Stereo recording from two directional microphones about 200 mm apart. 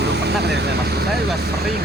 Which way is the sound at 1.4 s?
50° right (ahead or behind).